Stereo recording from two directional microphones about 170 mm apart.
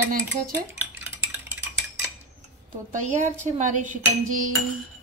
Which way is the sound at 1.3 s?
15° right (ahead or behind).